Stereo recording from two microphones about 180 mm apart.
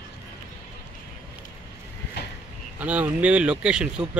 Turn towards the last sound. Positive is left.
turn(degrees=-5)  # may be behind; listen again after turning